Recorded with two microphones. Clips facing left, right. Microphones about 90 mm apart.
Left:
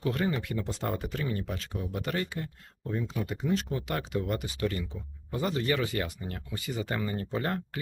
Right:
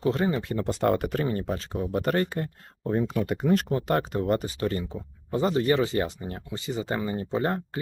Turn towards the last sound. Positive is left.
turn(degrees=-25)  # may be behind; listen again after turning